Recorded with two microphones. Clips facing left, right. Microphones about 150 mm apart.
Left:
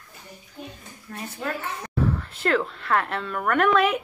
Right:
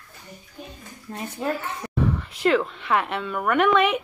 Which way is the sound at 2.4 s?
5° right (ahead or behind).